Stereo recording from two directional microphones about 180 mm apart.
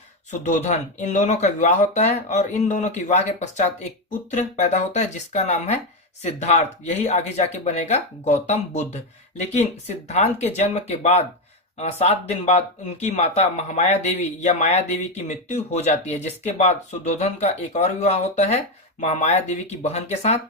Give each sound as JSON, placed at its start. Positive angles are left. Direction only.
{"t": 0.3, "sound": "speech", "side_deg": 40}